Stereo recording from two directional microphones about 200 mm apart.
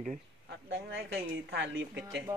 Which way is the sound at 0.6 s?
60° right (ahead or behind).